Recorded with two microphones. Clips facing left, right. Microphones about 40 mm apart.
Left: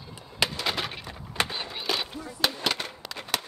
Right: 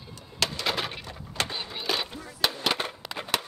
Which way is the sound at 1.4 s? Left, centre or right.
Centre.